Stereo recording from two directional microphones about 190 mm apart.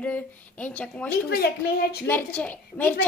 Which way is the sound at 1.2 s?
55° left (ahead or behind).